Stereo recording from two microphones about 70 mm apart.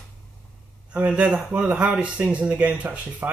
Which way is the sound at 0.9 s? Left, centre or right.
Centre.